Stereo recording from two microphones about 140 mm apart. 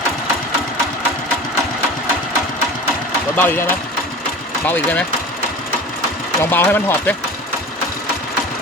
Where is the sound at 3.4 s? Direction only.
15° left (ahead or behind).